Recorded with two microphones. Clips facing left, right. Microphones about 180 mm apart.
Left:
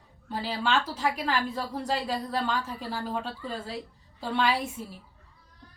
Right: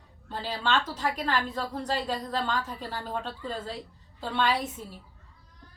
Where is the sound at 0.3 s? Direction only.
10° left (ahead or behind).